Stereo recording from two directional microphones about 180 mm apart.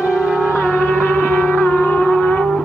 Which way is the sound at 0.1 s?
Centre (ahead or behind).